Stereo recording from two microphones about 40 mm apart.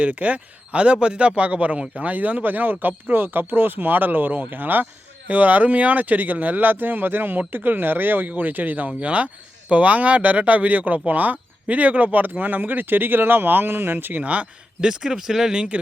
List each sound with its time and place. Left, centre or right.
0.0 s speech: right
5.3 s speech: right
8.3 s speech: right
9.0 s speech: right
14.2 s speech: right
14.8 s speech: centre